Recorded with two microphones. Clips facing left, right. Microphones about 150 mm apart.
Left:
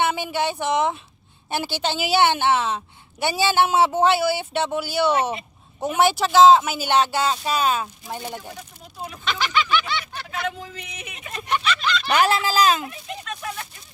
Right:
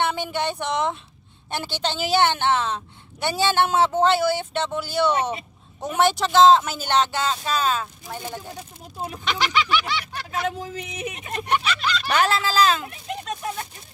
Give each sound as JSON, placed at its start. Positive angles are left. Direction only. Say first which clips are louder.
{"t": 0.0, "sound": "a woman's voice", "louder": "left 2 dB", "side_deg": 5}
{"t": 9.2, "sound": "a sound", "louder": "even", "side_deg": -15}
{"t": 10.4, "sound": "speech", "louder": "right 1 dB", "side_deg": -40}
{"t": 11.3, "sound": "speech", "louder": "even", "side_deg": -60}
{"t": 12.0, "sound": "a woman's voice", "louder": "left 2 dB", "side_deg": 15}
{"t": 13.2, "sound": "a sound", "louder": "right 2 dB", "side_deg": -30}